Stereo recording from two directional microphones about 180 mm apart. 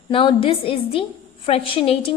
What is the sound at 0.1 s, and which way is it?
A woman's voice, 30° left (ahead or behind).